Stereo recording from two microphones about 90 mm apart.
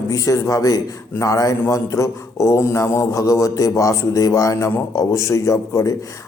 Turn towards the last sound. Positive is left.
turn(degrees=35)  # may be behind; listen again after turning